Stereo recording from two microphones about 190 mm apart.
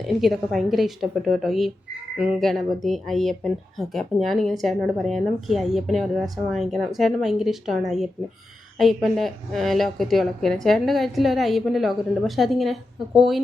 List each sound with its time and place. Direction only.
0.0 s speech: centre (ahead or behind)